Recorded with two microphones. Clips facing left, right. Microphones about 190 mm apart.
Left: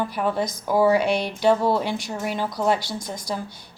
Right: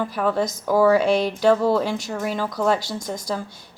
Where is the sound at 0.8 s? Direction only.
45° right (ahead or behind).